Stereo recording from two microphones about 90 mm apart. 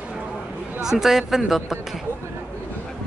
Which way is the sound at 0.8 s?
5° right (ahead or behind).